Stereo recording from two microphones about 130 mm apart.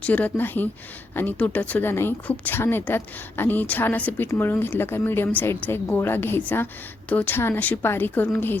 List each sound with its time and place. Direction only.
0.0 s a woman's voice: 10° left (ahead or behind)